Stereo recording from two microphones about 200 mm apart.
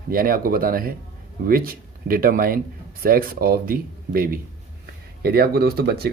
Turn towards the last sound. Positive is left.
turn(degrees=-50)  # may be behind; listen again after turning